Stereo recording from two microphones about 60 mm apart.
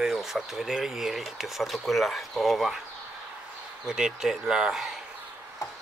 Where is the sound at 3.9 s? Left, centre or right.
Centre.